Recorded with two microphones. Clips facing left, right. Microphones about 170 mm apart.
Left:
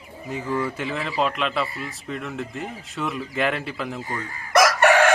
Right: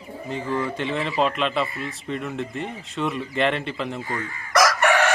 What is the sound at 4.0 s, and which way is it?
Chicken, 20° left (ahead or behind).